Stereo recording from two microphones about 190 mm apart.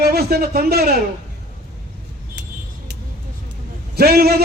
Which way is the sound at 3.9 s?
55° right (ahead or behind).